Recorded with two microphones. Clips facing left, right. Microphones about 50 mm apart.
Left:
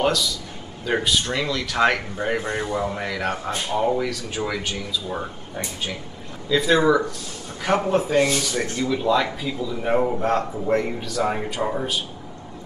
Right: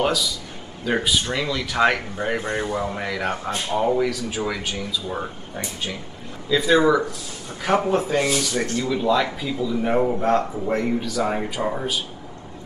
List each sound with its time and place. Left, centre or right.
0.0 s speech: centre